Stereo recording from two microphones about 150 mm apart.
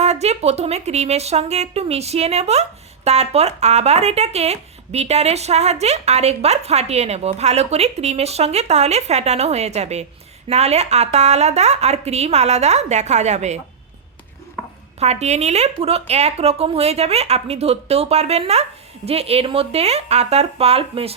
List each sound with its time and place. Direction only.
0.0 s speech: 45° right (ahead or behind)
14.9 s speech: 45° right (ahead or behind)